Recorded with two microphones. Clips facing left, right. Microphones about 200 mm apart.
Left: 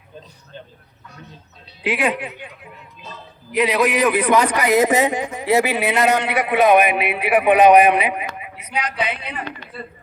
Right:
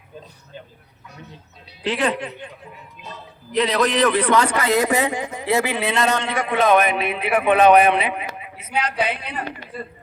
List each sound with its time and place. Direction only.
1.8 s speech: 10° left (ahead or behind)
3.5 s speech: 10° left (ahead or behind)